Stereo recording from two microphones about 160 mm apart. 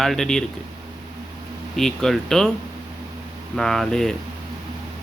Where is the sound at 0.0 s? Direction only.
Centre (ahead or behind).